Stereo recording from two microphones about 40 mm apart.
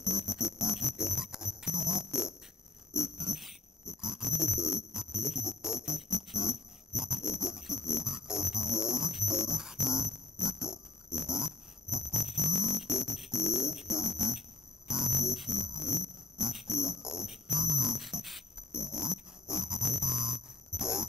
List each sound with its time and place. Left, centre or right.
0.0 s music: centre
2.9 s a sound: centre
12.2 s music: centre
18.7 s music: centre